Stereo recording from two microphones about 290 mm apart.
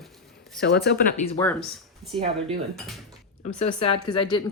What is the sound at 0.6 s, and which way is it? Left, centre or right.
Speech, left.